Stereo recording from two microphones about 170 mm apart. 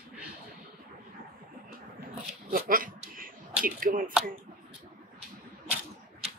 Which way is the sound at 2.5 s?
55° right (ahead or behind).